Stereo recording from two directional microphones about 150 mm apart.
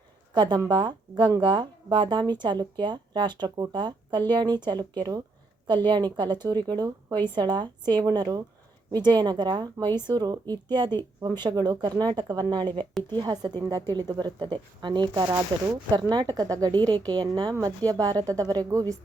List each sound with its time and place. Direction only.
0.3 s a woman's voice: 30° right (ahead or behind)